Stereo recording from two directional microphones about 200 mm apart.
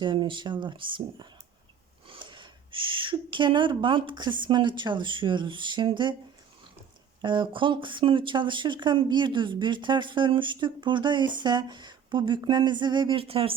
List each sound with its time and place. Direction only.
0.0 s speech: 25° right (ahead or behind)
2.0 s a sound: 25° right (ahead or behind)
4.4 s speech: 25° right (ahead or behind)
7.2 s speech: 25° right (ahead or behind)